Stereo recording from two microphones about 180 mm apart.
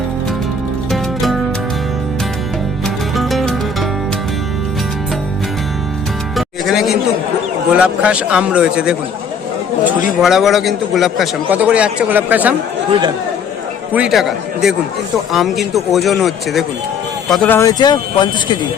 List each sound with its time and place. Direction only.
0.9 s music: centre (ahead or behind)
2.8 s music: centre (ahead or behind)
6.3 s music: centre (ahead or behind)
7.7 s a man's voice: 5° right (ahead or behind)
10.2 s a man's voice: centre (ahead or behind)
13.9 s a man's voice: 5° right (ahead or behind)
17.6 s speech: 20° left (ahead or behind)